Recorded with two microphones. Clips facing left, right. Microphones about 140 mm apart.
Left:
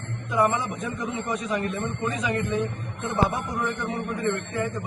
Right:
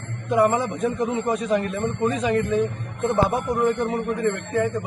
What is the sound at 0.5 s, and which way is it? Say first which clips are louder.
A man's voice: right 6 dB; 50° right (ahead or behind).